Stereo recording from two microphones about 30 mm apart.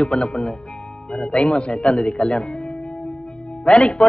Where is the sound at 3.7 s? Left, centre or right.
Left.